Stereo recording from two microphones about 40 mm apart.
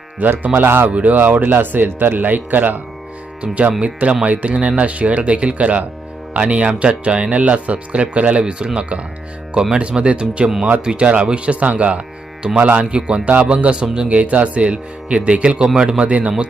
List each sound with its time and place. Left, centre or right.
0.2 s speech: right
0.9 s speech: right
1.2 s speech: right
3.4 s speech: right
12.9 s speech: right
13.3 s speech: right